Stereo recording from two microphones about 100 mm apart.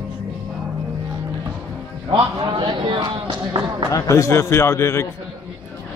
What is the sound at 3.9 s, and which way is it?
A man's voice, 30° left (ahead or behind).